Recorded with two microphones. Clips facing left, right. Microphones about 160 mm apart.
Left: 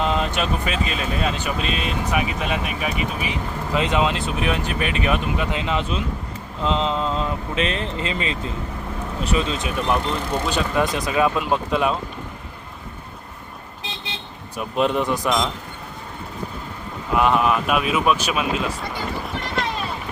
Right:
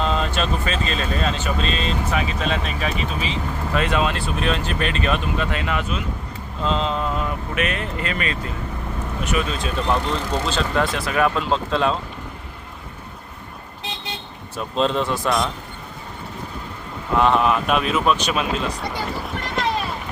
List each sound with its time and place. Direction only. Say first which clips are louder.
0.0 s speech: even; 15° left (ahead or behind)
14.5 s speech: even; 15° left (ahead or behind)
17.2 s speech: right 1 dB; 10° left (ahead or behind)
19.1 s run: even; centre (ahead or behind)